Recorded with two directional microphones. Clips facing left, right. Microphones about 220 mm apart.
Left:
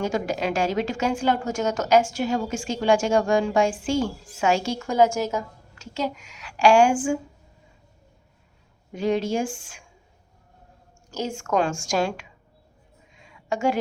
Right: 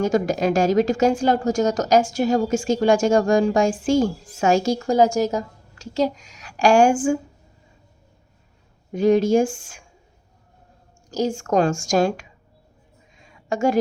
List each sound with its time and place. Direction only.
0.0 s a woman's voice: 45° right (ahead or behind)
8.9 s speech: 45° right (ahead or behind)
11.1 s a woman's voice: 35° right (ahead or behind)
13.1 s a sound: 45° right (ahead or behind)